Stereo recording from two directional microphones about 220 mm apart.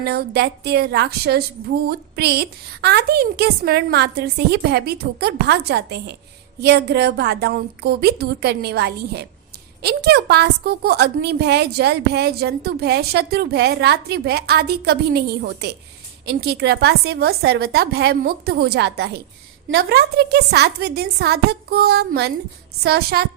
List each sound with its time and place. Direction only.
0.0 s a woman's voice: 45° right (ahead or behind)